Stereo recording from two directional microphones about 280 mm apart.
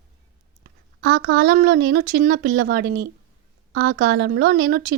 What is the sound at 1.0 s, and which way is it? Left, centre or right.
Speech, right.